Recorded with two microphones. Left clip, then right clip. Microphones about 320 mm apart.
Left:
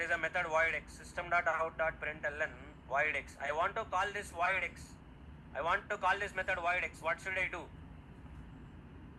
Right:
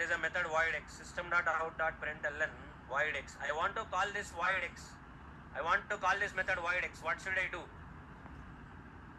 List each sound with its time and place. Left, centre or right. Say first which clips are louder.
0.1 s speech: left 1 dB; left